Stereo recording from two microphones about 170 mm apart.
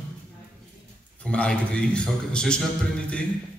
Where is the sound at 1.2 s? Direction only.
5° left (ahead or behind).